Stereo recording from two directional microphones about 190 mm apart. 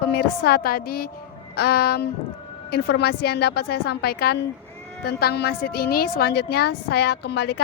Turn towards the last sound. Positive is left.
turn(degrees=60)  # may be behind; listen again after turning